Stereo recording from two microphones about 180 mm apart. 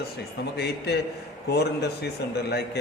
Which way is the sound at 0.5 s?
65° left (ahead or behind).